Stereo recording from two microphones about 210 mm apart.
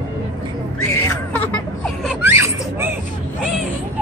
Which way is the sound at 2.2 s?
10° right (ahead or behind).